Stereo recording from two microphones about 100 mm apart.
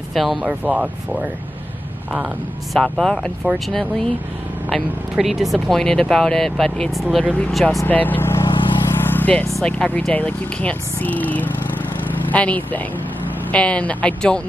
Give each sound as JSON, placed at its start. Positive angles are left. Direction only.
{"t": 0.1, "sound": "speech", "side_deg": 0}
{"t": 2.7, "sound": "speech", "side_deg": 5}
{"t": 7.8, "sound": "speech", "side_deg": 15}
{"t": 8.9, "sound": "vehicle", "side_deg": 20}
{"t": 9.6, "sound": "speech", "side_deg": 10}